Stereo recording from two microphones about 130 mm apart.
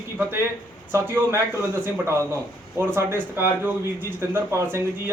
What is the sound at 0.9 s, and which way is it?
A man's voice, 20° right (ahead or behind).